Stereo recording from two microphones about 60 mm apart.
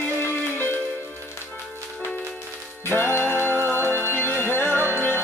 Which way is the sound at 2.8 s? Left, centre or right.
Left.